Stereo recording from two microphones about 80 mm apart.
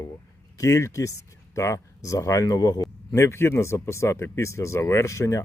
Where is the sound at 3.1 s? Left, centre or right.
Left.